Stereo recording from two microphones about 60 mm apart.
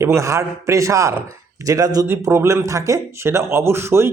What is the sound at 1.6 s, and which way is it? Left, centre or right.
Speech, right.